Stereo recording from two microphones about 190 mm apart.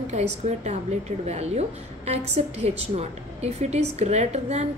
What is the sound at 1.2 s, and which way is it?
A woman's voice, 35° right (ahead or behind).